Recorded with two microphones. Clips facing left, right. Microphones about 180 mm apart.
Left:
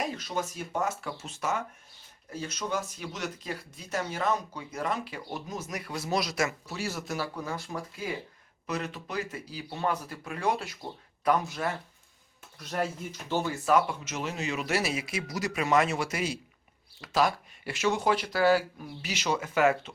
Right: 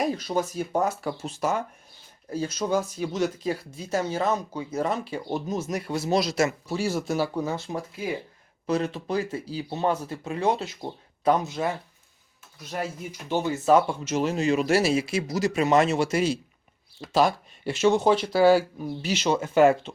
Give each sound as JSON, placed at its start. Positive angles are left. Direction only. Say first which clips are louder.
{"t": 0.0, "sound": "speech", "louder": "right 7 dB", "side_deg": -35}
{"t": 12.5, "sound": "speech", "louder": "even", "side_deg": -5}